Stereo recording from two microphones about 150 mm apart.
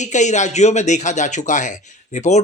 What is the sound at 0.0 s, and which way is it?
A man's voice, 50° left (ahead or behind).